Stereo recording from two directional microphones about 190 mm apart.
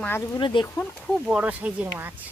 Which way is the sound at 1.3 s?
5° right (ahead or behind).